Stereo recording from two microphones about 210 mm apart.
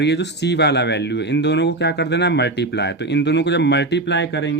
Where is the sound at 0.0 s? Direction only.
55° left (ahead or behind).